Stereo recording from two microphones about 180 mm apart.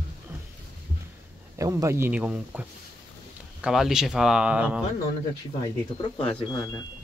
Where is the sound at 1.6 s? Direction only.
15° right (ahead or behind).